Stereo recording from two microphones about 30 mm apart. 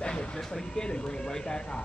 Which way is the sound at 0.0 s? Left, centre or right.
Left.